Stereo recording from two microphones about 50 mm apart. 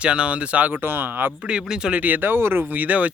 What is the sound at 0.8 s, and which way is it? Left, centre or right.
Speech, right.